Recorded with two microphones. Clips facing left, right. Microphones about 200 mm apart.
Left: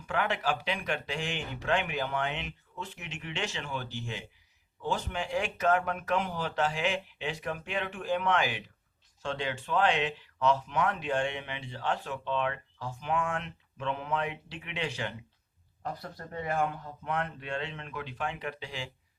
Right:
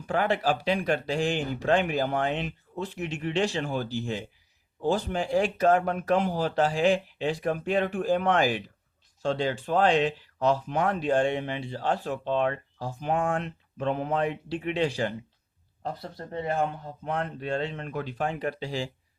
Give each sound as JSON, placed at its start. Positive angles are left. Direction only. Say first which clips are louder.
{"t": 0.1, "sound": "speech", "louder": "right 5 dB", "side_deg": -35}